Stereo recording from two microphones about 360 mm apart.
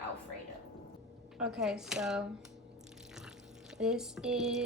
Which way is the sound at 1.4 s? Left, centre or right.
Centre.